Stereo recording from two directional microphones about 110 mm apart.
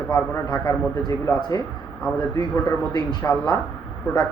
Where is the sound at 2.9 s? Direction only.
40° left (ahead or behind).